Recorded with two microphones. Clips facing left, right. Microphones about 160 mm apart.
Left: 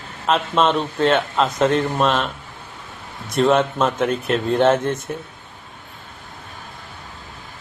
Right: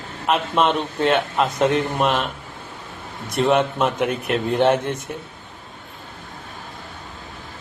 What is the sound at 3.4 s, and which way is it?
Speech, 15° right (ahead or behind).